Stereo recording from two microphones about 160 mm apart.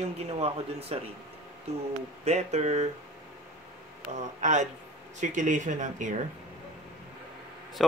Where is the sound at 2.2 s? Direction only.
45° right (ahead or behind).